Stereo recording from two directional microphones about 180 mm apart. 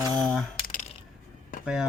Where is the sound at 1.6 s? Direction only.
5° right (ahead or behind).